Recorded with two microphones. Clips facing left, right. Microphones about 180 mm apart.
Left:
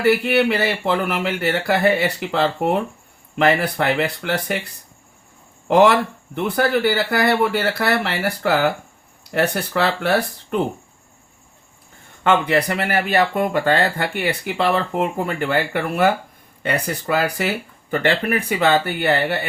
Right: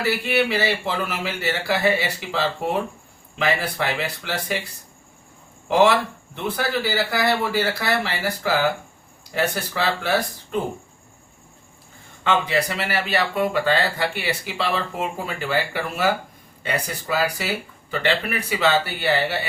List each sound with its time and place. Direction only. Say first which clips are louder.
0.0 s speech: left 5 dB; 60° left (ahead or behind)
5.6 s speech: left 3 dB; 60° left (ahead or behind)
12.2 s speech: left 4 dB; 55° left (ahead or behind)